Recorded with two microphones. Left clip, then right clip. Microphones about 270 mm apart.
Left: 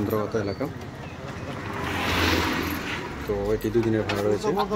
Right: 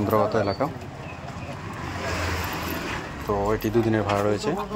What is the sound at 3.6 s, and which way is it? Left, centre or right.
Speech, centre.